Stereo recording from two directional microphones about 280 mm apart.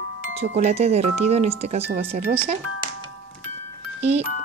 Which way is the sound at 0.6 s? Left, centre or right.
Right.